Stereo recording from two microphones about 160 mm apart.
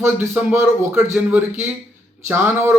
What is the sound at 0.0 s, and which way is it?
Speech, 15° right (ahead or behind).